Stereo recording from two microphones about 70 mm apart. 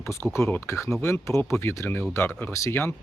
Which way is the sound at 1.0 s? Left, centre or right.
Left.